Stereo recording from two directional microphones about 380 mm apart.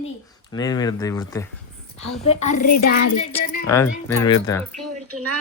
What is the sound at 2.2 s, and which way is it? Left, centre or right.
Child singing, centre.